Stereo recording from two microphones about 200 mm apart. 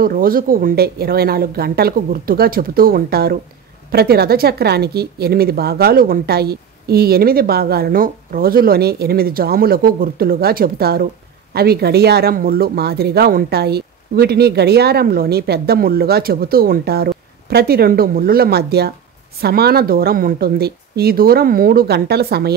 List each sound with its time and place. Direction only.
0.0 s speech: 45° right (ahead or behind)